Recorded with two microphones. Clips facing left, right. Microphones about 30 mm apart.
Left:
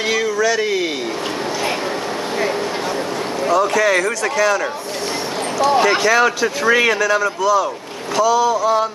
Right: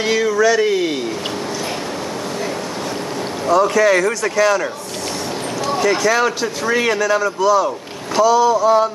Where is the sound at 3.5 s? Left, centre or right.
Centre.